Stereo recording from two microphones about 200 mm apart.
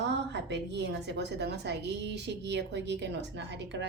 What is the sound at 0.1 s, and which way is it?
A woman's voice, 60° right (ahead or behind).